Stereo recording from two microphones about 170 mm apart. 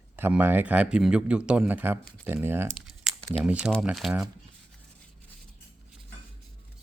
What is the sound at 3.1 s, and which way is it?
Speech, centre (ahead or behind).